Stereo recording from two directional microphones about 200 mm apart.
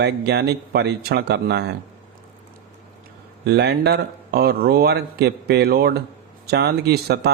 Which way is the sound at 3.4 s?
55° right (ahead or behind).